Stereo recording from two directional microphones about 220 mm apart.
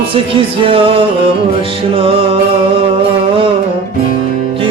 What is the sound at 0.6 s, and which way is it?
Music, 25° right (ahead or behind).